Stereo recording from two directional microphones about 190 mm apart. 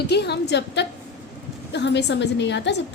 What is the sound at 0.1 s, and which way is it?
A woman's voice, 60° left (ahead or behind).